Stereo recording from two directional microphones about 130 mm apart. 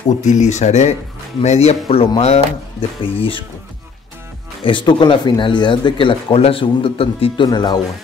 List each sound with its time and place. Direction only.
0.2 s speech: 65° left (ahead or behind); by 3.4 s 45° left (ahead or behind)
4.6 s speech: 40° left (ahead or behind)
7.4 s speech: 35° left (ahead or behind)